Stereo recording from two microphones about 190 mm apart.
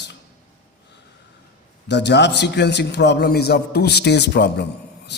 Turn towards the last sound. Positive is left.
turn(degrees=60)  # may be behind; listen again after turning